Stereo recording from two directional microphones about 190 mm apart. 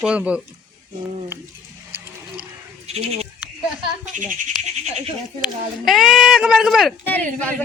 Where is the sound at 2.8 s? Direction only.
35° right (ahead or behind).